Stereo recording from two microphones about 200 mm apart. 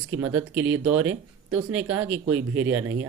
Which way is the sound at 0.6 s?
75° right (ahead or behind).